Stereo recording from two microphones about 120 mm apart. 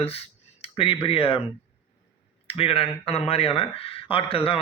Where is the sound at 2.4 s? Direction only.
50° left (ahead or behind).